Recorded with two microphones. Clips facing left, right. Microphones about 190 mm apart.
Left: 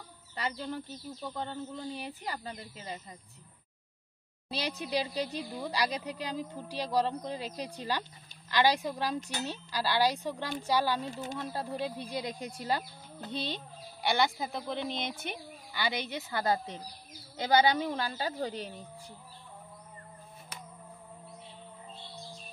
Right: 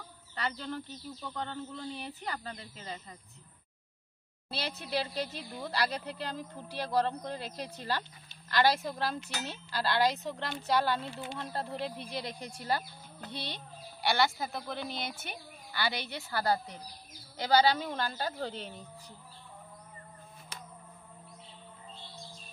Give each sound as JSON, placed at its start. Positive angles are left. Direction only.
{"t": 0.4, "sound": "speech", "side_deg": 15}
{"t": 4.5, "sound": "speech", "side_deg": 15}
{"t": 11.1, "sound": "speech", "side_deg": 45}
{"t": 11.3, "sound": "a woman's voice", "side_deg": 10}